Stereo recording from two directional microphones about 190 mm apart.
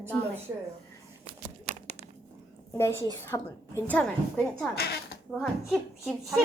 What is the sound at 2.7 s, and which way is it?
A woman's voice, 15° left (ahead or behind).